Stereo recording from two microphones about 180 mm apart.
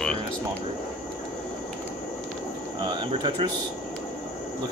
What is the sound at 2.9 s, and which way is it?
Speech, 30° right (ahead or behind).